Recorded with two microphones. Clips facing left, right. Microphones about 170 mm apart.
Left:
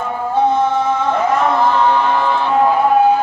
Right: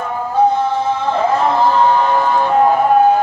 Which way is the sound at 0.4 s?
35° right (ahead or behind).